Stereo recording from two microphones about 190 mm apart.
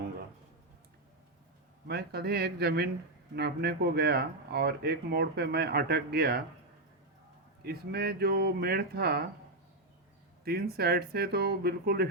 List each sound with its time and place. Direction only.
1.9 s speech: 55° right (ahead or behind)
7.6 s speech: 55° right (ahead or behind)
10.4 s speech: 55° right (ahead or behind)